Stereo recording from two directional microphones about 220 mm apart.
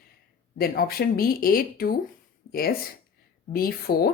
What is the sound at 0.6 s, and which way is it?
Speech, 45° left (ahead or behind).